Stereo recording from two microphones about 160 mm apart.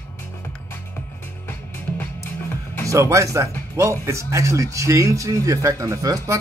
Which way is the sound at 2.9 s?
20° right (ahead or behind).